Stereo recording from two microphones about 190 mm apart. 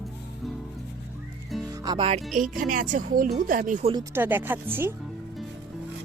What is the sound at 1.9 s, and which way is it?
Speech, 30° right (ahead or behind).